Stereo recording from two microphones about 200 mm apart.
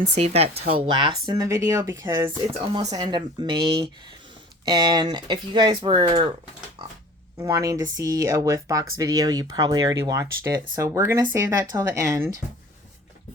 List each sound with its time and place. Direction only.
0.1 s speech: 30° right (ahead or behind)
7.3 s speech: 15° right (ahead or behind)